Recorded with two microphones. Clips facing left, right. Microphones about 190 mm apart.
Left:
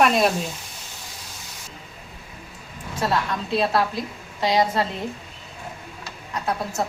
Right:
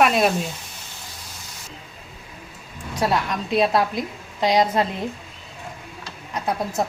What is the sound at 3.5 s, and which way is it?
A woman's voice, 15° right (ahead or behind).